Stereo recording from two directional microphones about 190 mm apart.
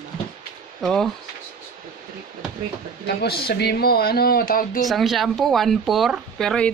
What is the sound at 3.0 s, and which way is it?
Speech, 55° left (ahead or behind).